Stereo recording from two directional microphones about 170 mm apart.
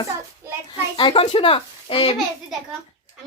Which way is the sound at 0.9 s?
30° left (ahead or behind).